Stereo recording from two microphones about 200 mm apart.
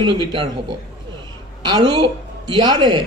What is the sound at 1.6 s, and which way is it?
A man's voice, 20° right (ahead or behind).